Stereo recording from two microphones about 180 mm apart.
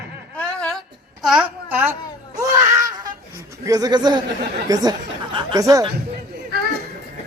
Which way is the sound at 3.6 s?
20° right (ahead or behind).